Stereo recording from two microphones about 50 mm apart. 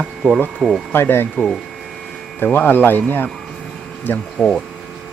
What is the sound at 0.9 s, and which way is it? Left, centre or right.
Speech, left.